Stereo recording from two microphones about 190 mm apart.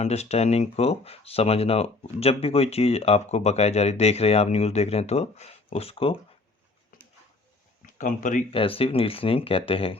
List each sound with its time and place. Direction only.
0.0 s speech: 35° left (ahead or behind)
7.8 s speech: 45° left (ahead or behind)
8.5 s speech: 30° left (ahead or behind)